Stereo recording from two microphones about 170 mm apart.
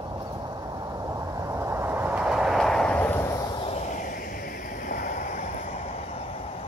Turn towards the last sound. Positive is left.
turn(degrees=45)  # may be behind; listen again after turning